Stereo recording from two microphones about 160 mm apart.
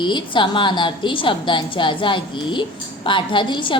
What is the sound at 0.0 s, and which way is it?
A woman's voice, 30° left (ahead or behind).